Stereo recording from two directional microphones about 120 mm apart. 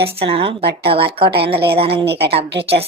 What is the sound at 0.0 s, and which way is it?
A woman's voice, 50° right (ahead or behind).